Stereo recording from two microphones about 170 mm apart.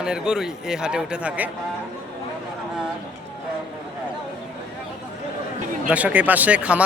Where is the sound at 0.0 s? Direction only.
5° right (ahead or behind).